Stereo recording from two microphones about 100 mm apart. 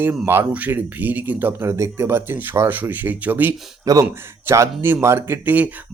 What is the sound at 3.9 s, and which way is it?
Speech, 40° right (ahead or behind).